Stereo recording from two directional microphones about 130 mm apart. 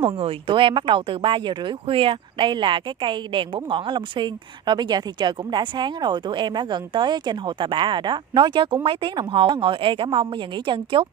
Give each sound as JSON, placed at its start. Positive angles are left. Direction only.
{"t": 0.0, "sound": "speech", "side_deg": -45}